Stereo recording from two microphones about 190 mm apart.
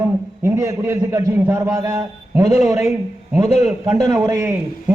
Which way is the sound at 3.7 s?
Centre (ahead or behind).